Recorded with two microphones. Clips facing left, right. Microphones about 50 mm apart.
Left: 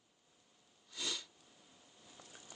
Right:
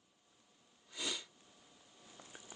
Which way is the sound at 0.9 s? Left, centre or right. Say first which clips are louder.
Right 1 dB; centre.